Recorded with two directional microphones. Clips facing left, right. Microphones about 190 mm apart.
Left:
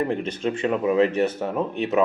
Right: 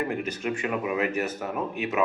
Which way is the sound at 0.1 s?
30° left (ahead or behind).